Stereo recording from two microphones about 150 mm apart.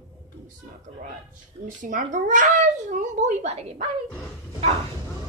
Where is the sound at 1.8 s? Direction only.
65° right (ahead or behind); by 3.8 s 50° right (ahead or behind).